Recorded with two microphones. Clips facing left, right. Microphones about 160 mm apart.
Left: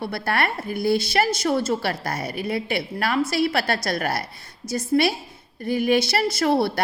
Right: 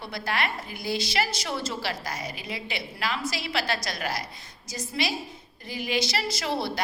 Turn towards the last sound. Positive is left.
turn(degrees=55)  # may be behind; listen again after turning